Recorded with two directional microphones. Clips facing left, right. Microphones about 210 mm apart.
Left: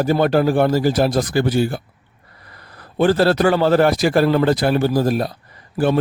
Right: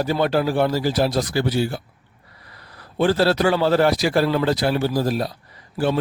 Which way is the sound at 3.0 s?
50° left (ahead or behind).